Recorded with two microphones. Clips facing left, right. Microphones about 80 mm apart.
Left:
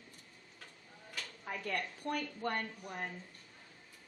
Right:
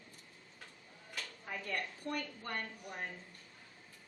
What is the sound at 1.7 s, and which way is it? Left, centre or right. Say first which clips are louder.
Speech: left 2 dB; left.